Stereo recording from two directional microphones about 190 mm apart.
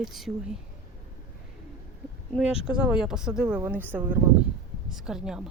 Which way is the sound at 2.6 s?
5° right (ahead or behind).